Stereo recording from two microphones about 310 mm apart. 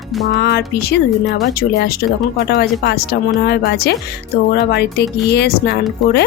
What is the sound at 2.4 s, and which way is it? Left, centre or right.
Speech, left.